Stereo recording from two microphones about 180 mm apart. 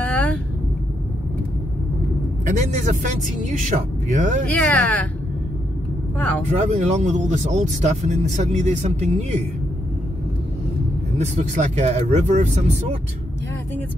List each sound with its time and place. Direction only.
0.0 s vehicle: 5° left (ahead or behind)
2.4 s a man's voice: 40° right (ahead or behind)
4.5 s speech: 10° left (ahead or behind)
6.1 s speech: 10° left (ahead or behind)
6.5 s speech: 40° right (ahead or behind)
11.1 s speech: 40° right (ahead or behind)